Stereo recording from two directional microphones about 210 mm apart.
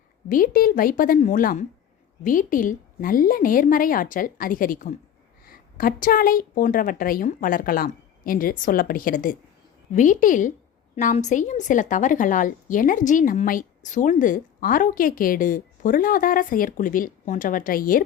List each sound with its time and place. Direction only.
0.3 s a woman's voice: 40° left (ahead or behind)